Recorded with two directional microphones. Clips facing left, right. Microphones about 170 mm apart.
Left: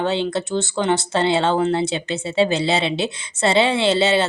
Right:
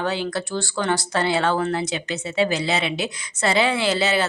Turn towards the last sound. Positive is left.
turn(degrees=25)  # may be behind; listen again after turning